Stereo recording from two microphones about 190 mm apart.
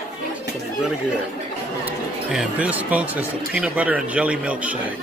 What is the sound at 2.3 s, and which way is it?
Speech, 5° right (ahead or behind).